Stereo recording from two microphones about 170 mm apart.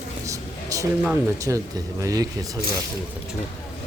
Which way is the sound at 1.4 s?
20° right (ahead or behind).